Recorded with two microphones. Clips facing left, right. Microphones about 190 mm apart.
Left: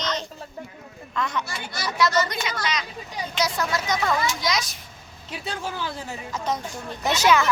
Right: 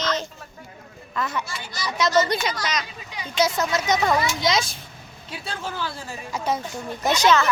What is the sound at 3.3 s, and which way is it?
A child's voice, 25° right (ahead or behind).